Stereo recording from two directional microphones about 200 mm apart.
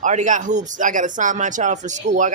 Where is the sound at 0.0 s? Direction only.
40° right (ahead or behind).